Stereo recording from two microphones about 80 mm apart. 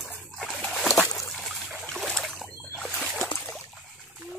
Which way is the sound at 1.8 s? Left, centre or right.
Centre.